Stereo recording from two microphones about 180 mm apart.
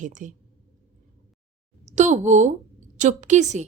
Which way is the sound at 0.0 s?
45° right (ahead or behind).